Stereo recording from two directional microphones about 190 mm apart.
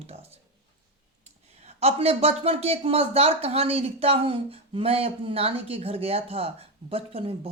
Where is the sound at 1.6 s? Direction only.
35° right (ahead or behind).